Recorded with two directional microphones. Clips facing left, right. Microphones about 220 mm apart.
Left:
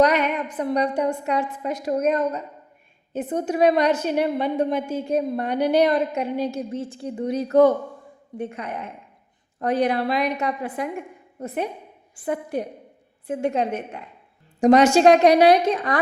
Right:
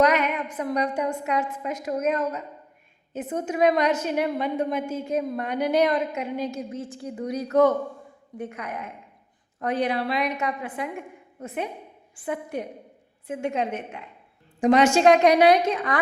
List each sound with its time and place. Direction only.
0.0 s a woman's voice: 35° left (ahead or behind)